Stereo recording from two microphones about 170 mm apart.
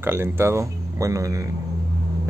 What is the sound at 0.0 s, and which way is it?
A man's voice, 15° right (ahead or behind).